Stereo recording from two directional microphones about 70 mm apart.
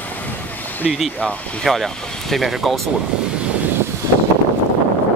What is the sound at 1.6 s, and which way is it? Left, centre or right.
Speech, centre.